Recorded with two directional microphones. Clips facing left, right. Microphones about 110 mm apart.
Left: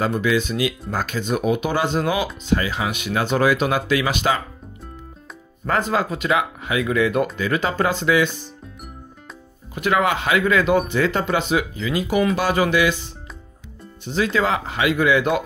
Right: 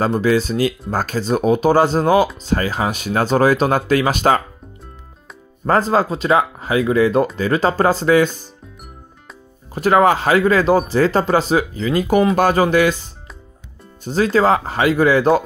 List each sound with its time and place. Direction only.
0.0 s speech: 35° right (ahead or behind)
5.7 s speech: 35° right (ahead or behind)
9.8 s speech: 35° right (ahead or behind)